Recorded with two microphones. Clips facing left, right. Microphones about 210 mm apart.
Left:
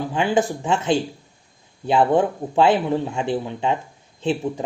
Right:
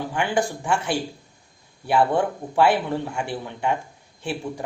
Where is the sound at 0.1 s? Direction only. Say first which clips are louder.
Left 4 dB; 20° left (ahead or behind).